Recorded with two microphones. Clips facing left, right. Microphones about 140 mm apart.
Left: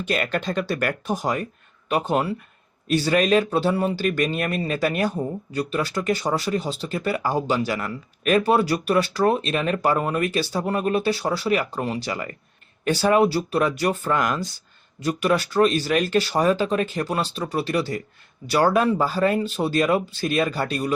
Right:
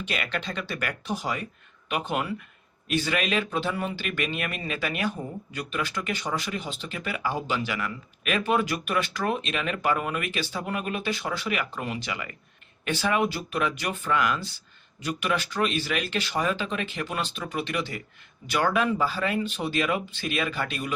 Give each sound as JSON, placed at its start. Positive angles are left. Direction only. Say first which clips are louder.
{"t": 0.0, "sound": "speech", "louder": "left 7 dB", "side_deg": 45}